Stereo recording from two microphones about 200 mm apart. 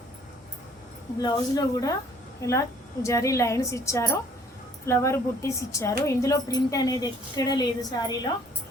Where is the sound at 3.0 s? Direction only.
15° left (ahead or behind).